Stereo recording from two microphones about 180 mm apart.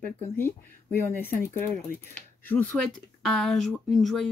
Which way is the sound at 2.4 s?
10° left (ahead or behind).